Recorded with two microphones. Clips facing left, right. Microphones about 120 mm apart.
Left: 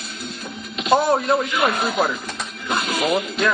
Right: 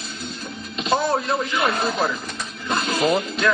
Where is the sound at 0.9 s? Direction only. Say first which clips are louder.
Left 4 dB; 5° left (ahead or behind).